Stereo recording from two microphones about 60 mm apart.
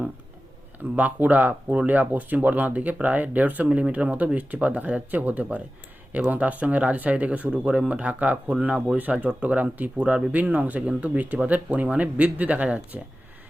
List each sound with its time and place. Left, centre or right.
0.9 s speech: right
10.0 s speech: centre
10.3 s speech: right